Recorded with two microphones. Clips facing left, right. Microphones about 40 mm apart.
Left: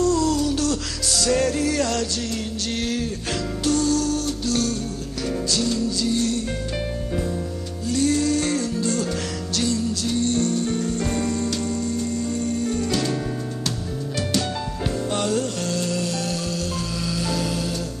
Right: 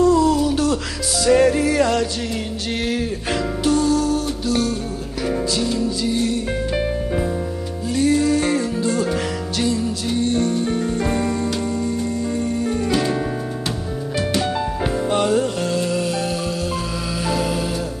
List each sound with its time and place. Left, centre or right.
0.0 s a sound: centre
1.2 s music: centre
7.9 s music: centre
15.0 s music: centre
17.2 s music: centre